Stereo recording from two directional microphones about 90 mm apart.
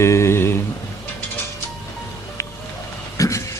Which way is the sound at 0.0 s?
30° left (ahead or behind).